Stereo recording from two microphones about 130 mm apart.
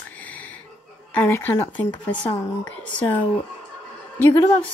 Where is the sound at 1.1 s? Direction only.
15° left (ahead or behind).